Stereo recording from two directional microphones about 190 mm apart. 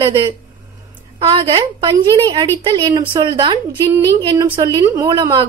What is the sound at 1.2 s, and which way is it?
A woman's voice, 30° right (ahead or behind).